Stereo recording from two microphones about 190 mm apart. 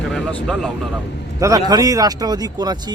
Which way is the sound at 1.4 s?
20° right (ahead or behind).